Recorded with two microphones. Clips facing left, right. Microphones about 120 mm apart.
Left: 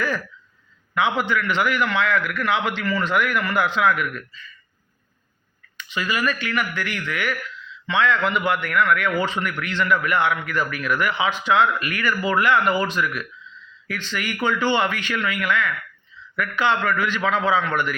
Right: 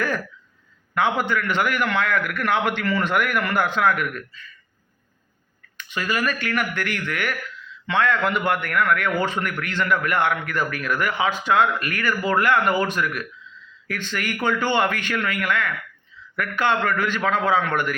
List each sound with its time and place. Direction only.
0.9 s a man's voice: 45° right (ahead or behind)
5.7 s a man's voice: 50° right (ahead or behind)